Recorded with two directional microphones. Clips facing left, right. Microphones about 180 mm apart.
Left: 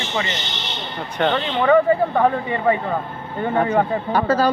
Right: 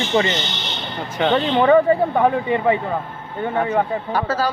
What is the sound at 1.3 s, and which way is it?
Speech, 25° right (ahead or behind).